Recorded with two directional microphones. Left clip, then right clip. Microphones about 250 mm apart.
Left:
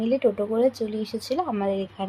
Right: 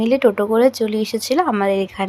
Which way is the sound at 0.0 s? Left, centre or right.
Centre.